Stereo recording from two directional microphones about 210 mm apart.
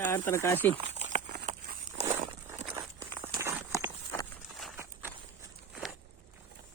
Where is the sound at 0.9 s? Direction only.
30° right (ahead or behind).